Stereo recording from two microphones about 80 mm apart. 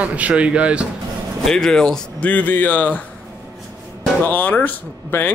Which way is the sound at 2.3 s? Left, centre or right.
Left.